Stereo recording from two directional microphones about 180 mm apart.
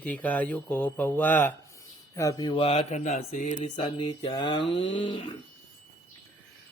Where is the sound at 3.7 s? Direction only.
30° left (ahead or behind).